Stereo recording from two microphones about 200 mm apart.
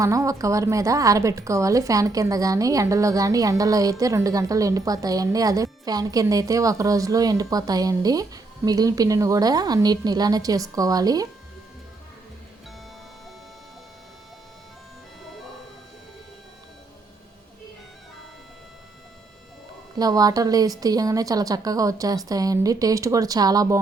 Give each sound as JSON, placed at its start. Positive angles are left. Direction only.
{"t": 0.0, "sound": "a woman's voice", "side_deg": -15}
{"t": 20.0, "sound": "a woman's voice", "side_deg": -20}